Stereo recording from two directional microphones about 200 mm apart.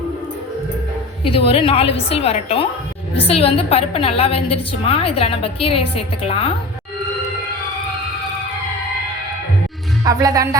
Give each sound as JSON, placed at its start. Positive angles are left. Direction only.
{"t": 1.5, "sound": "a woman's voice", "side_deg": 30}
{"t": 10.0, "sound": "speech", "side_deg": -15}